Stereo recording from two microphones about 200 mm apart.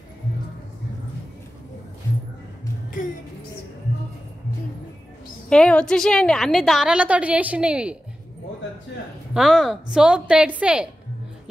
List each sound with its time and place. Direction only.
3.0 s music: 40° left (ahead or behind)
5.5 s a woman's voice: 5° left (ahead or behind)
9.3 s a woman's voice: centre (ahead or behind)